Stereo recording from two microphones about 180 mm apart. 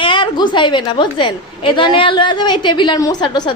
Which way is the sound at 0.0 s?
30° left (ahead or behind).